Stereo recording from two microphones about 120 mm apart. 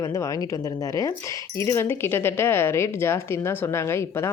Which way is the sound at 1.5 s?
20° left (ahead or behind).